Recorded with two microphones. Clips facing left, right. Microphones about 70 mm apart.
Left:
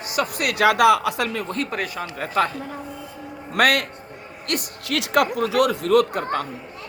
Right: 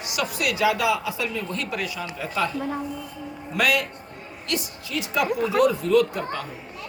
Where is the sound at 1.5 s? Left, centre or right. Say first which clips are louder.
Left 3 dB; left.